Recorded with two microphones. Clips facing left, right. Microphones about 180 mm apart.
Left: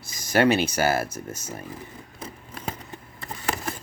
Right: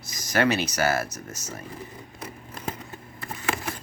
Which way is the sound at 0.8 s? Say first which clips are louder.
Left 2 dB; 30° left (ahead or behind).